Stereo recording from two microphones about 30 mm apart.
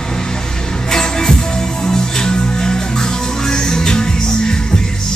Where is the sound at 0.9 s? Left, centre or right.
Left.